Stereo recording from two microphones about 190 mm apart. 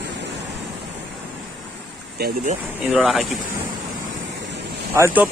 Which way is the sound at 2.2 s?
55° right (ahead or behind).